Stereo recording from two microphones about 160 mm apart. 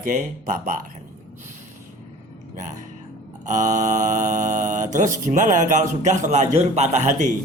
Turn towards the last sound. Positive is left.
turn(degrees=-50)  # may be behind; listen again after turning